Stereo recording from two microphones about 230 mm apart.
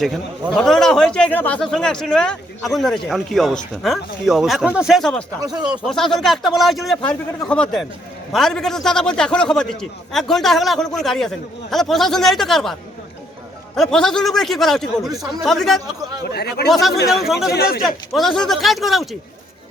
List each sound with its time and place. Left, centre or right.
0.0 s a man's voice: centre
5.4 s speech: centre
5.8 s a man's voice: centre
13.7 s a man's voice: centre
15.1 s speech: centre
15.4 s a man's voice: centre
16.3 s speech: left
16.6 s a man's voice: centre
17.5 s a man's voice: left
17.8 s a man's voice: centre